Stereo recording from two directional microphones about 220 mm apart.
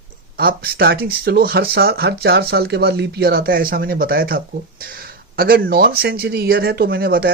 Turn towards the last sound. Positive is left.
turn(degrees=-45)  # may be behind; listen again after turning